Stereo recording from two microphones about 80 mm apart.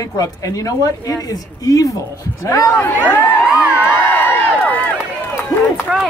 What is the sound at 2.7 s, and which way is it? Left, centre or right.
Speech, left.